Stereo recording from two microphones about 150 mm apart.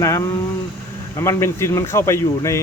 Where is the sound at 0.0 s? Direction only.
20° left (ahead or behind).